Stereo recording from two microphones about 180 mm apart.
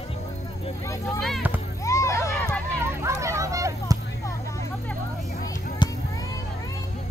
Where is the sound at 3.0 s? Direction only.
15° right (ahead or behind).